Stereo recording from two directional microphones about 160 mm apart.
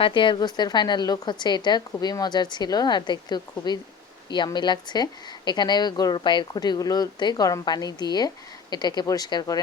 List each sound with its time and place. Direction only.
0.0 s a woman's voice: 30° left (ahead or behind)